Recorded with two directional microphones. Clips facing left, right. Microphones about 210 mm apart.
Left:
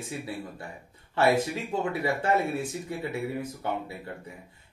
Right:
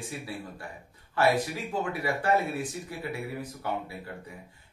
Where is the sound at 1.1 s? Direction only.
25° left (ahead or behind).